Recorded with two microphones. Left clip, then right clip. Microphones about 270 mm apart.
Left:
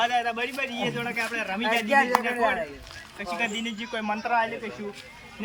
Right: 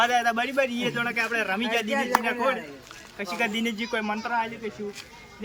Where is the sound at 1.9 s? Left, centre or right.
Left.